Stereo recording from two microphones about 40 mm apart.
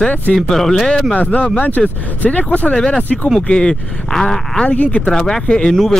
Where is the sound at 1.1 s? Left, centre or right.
Left.